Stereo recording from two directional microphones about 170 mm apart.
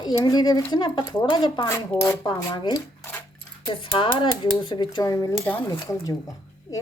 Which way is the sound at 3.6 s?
30° left (ahead or behind).